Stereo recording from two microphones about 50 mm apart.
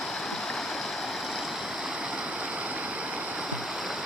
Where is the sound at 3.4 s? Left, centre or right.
Centre.